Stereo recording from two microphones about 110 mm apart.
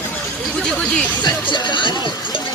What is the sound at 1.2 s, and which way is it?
Music, 45° left (ahead or behind).